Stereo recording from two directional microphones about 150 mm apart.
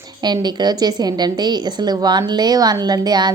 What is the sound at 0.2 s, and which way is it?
A woman's voice, 30° right (ahead or behind).